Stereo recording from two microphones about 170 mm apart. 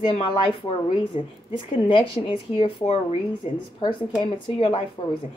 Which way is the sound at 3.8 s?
35° left (ahead or behind).